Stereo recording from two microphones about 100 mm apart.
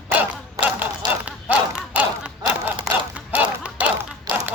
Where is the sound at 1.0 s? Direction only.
45° right (ahead or behind).